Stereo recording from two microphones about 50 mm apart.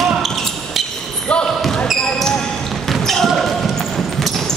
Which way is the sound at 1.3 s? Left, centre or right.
Left.